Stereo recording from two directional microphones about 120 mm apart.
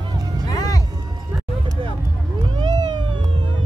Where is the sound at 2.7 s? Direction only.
35° right (ahead or behind).